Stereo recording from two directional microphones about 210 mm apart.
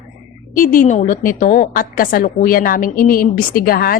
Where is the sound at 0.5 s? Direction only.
40° left (ahead or behind).